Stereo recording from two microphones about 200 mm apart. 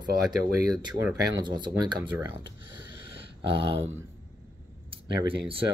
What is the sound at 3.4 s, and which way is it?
Speech, 25° right (ahead or behind).